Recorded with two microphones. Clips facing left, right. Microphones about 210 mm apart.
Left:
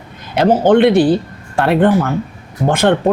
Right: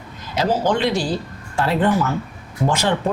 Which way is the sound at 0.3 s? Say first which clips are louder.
Left 9 dB; 60° left (ahead or behind).